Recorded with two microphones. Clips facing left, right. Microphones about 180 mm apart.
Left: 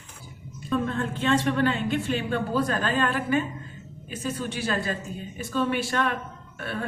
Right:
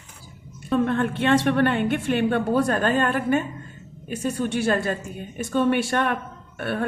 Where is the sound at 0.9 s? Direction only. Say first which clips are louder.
Right 4 dB; 70° right (ahead or behind).